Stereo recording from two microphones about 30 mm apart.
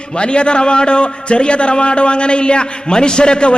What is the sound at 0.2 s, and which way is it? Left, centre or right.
A man's voice, left.